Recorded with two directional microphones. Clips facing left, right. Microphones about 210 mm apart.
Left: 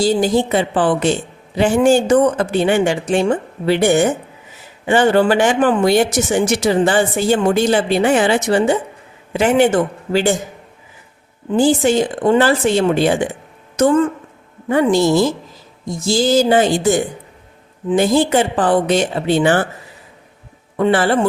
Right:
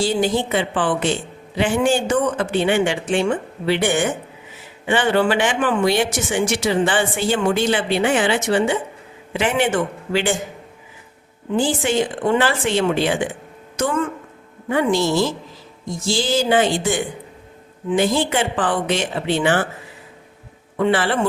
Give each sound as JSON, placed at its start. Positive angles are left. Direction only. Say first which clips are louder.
{"t": 0.0, "sound": "speech", "louder": "left 4 dB", "side_deg": 40}
{"t": 11.5, "sound": "a woman's voice", "louder": "left 6 dB", "side_deg": 40}
{"t": 20.7, "sound": "speech", "louder": "left 4 dB", "side_deg": 40}